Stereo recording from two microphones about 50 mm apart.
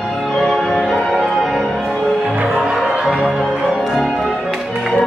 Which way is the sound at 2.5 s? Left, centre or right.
Centre.